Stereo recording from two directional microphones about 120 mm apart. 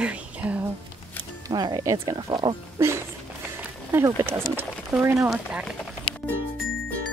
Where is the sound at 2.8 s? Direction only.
20° right (ahead or behind).